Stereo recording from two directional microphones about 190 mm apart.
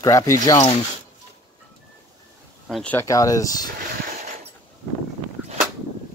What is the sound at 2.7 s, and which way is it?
Speech, 5° left (ahead or behind).